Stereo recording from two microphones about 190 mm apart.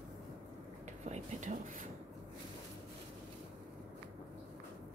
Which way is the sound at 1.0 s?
40° right (ahead or behind).